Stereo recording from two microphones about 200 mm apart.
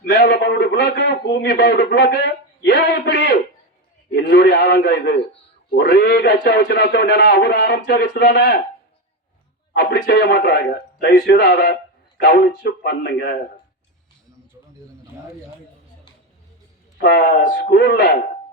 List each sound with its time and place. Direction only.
0.2 s a sound: 55° left (ahead or behind)
4.1 s a man's voice: 55° left (ahead or behind)
9.7 s a man's voice: 55° left (ahead or behind)
17.0 s a man's voice: 55° left (ahead or behind)